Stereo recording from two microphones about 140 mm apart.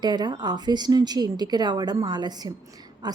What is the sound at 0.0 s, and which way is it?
A woman's voice, 30° right (ahead or behind).